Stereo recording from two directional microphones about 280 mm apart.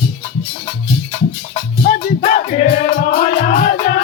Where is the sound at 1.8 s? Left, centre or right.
Left.